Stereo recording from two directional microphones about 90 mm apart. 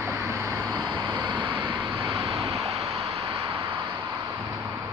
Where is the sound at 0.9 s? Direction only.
55° right (ahead or behind).